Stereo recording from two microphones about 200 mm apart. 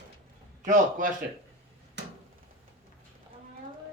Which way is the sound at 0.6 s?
40° right (ahead or behind).